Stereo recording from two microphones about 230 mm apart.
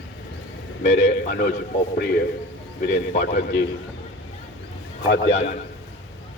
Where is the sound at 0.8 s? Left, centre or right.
Left.